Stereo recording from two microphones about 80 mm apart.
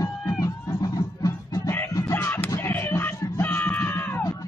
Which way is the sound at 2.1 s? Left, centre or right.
Left.